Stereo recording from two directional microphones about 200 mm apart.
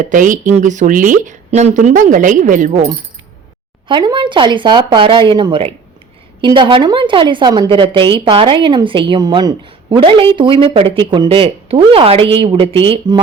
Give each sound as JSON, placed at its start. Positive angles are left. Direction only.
{"t": 0.1, "sound": "a woman's voice", "side_deg": -40}
{"t": 3.8, "sound": "a woman's voice", "side_deg": -25}